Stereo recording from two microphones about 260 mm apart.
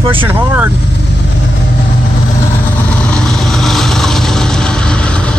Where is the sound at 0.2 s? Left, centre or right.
Centre.